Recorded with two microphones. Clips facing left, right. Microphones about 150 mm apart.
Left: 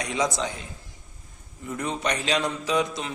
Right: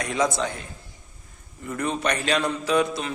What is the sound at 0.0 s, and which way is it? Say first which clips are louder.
Speech: right 2 dB; 15° left (ahead or behind).